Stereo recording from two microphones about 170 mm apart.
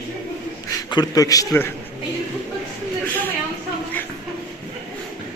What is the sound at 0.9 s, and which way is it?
Speech, 20° left (ahead or behind).